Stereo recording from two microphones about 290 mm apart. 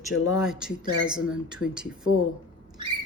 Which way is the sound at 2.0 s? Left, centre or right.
Left.